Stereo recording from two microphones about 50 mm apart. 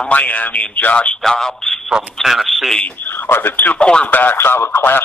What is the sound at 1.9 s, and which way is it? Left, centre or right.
Speech, centre.